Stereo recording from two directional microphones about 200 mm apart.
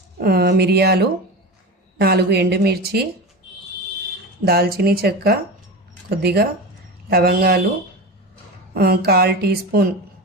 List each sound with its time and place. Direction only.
0.2 s speech: 50° right (ahead or behind)
4.4 s speech: 50° right (ahead or behind)
8.7 s speech: 50° right (ahead or behind)